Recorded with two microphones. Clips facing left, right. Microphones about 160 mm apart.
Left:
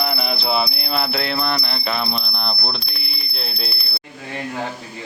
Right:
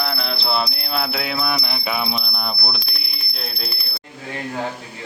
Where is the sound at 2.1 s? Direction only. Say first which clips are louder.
Even; 5° right (ahead or behind).